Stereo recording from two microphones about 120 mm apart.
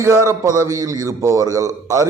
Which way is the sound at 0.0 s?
25° right (ahead or behind).